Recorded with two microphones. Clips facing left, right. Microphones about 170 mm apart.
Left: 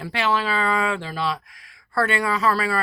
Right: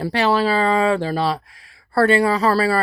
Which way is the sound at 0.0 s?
35° right (ahead or behind).